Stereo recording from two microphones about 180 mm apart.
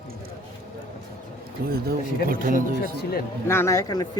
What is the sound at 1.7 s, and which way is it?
Speech, 55° right (ahead or behind).